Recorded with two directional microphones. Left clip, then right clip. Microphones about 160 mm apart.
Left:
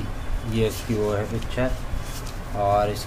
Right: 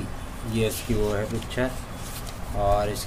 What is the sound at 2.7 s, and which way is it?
Speech, 10° right (ahead or behind).